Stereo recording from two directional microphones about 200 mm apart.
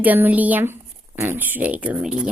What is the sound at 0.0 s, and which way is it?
Speech, 10° right (ahead or behind).